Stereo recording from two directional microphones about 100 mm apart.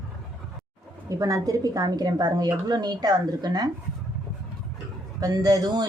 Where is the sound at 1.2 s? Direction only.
35° right (ahead or behind).